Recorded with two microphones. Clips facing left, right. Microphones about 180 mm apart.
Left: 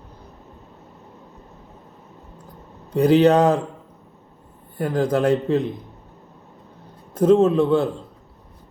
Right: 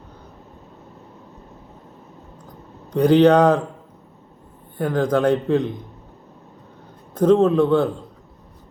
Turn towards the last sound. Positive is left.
turn(degrees=5)  # may be behind; listen again after turning